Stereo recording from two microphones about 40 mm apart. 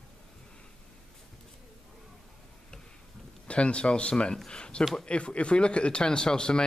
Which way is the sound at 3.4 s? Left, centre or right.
Left.